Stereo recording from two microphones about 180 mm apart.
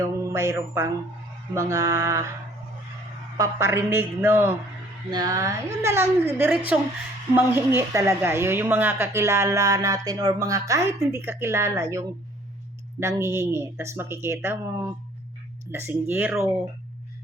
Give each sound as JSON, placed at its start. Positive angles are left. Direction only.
{"t": 0.0, "sound": "mantra", "side_deg": -15}
{"t": 1.5, "sound": "a woman's voice", "side_deg": -15}
{"t": 3.3, "sound": "a woman's voice", "side_deg": -15}
{"t": 7.8, "sound": "a woman's voice", "side_deg": -15}